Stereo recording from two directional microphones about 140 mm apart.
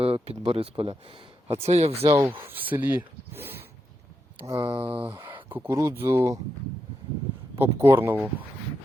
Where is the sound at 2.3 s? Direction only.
15° right (ahead or behind).